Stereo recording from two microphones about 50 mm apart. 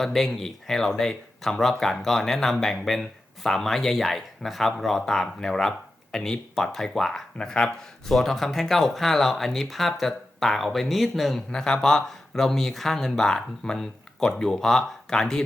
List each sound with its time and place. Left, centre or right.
0.0 s speech: centre
8.0 s speech: centre
11.5 s speech: centre